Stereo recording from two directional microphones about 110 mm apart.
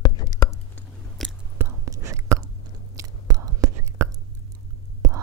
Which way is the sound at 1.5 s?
30° right (ahead or behind).